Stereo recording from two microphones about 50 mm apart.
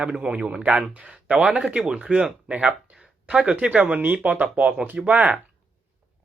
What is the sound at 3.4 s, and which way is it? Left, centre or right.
Speech, right.